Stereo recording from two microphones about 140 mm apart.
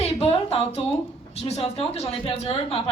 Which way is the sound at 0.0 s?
45° left (ahead or behind).